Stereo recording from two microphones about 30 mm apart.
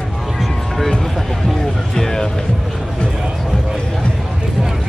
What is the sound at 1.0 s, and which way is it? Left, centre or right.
Music, centre.